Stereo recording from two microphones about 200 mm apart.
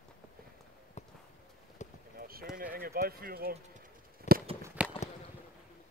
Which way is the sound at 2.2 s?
50° right (ahead or behind).